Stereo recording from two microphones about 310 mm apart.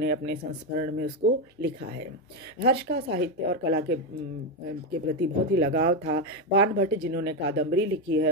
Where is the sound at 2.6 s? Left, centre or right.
Right.